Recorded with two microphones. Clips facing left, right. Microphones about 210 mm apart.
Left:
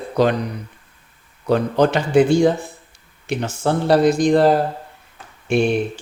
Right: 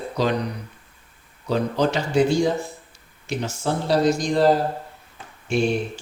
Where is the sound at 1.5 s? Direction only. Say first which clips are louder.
Left 5 dB; 60° left (ahead or behind).